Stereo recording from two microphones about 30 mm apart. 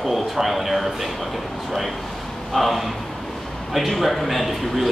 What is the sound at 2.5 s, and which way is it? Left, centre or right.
A man's voice, centre.